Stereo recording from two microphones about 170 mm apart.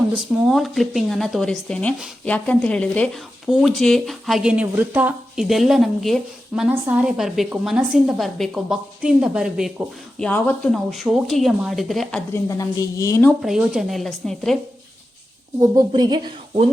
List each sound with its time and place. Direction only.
0.4 s speech: centre (ahead or behind)
12.3 s a woman's voice: 20° left (ahead or behind)
13.4 s speech: 5° right (ahead or behind)
15.6 s a woman's voice: 25° right (ahead or behind)